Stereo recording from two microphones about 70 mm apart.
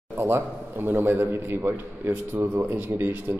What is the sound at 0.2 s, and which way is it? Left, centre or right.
A man's voice, right.